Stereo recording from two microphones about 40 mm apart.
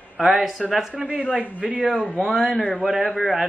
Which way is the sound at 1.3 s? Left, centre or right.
Left.